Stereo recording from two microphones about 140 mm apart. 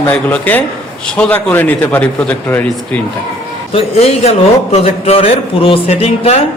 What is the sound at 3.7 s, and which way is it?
A man's voice, 50° left (ahead or behind).